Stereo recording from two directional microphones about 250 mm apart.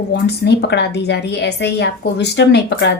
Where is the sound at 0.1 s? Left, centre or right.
Left.